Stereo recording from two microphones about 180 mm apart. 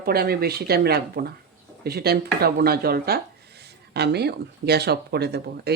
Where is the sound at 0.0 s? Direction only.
60° right (ahead or behind).